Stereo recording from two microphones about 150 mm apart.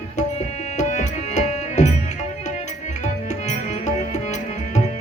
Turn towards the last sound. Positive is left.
turn(degrees=50)  # may be behind; listen again after turning